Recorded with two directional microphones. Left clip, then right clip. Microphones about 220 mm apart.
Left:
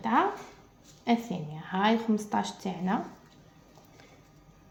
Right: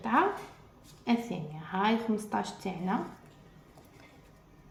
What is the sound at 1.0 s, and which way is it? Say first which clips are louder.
A woman's voice: left 3 dB; 30° left (ahead or behind).